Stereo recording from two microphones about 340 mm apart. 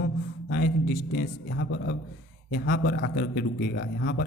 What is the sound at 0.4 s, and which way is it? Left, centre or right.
A man's voice, left.